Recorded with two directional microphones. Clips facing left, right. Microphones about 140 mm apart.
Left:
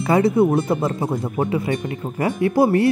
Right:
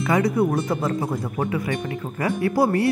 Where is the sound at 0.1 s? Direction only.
25° left (ahead or behind).